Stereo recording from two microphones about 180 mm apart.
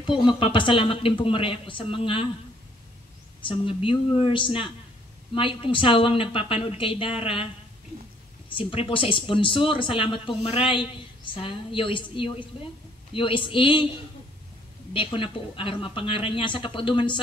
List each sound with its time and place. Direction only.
0.3 s speech: 25° left (ahead or behind)
3.4 s speech: 30° left (ahead or behind)
8.5 s speech: 30° left (ahead or behind)
14.9 s speech: 30° left (ahead or behind)